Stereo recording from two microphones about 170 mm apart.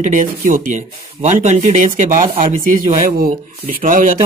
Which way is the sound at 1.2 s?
40° right (ahead or behind).